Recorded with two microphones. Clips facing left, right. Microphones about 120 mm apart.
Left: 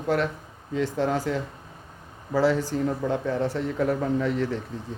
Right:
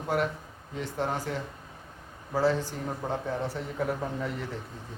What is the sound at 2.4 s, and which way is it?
Speech, 90° left.